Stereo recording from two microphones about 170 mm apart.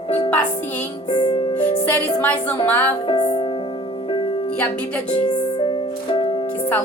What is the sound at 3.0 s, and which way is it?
Music, 35° left (ahead or behind).